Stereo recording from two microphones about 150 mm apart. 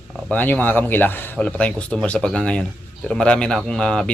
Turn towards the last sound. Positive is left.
turn(degrees=5)  # may be behind; listen again after turning